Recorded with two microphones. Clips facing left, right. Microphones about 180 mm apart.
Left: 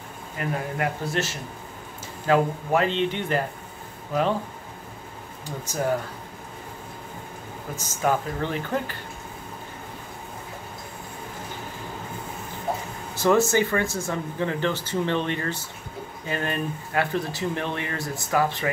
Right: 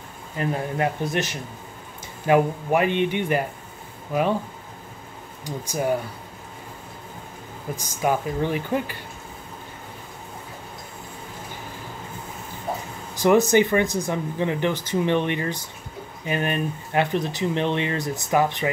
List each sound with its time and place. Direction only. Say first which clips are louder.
0.4 s speech: right 3 dB; 20° right (ahead or behind)
5.4 s speech: right 2 dB; 10° right (ahead or behind)
7.7 s speech: right 1 dB; 15° right (ahead or behind)
13.1 s speech: right 3 dB; 15° right (ahead or behind)